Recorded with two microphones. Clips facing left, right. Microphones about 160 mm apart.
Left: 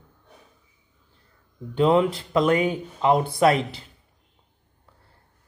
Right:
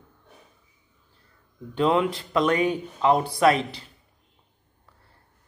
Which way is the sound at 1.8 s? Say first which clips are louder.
Left 3 dB; 30° left (ahead or behind).